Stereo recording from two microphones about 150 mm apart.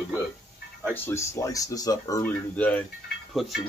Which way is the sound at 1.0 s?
20° left (ahead or behind).